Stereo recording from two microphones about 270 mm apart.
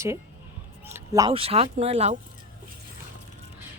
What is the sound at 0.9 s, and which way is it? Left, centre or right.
Speech, centre.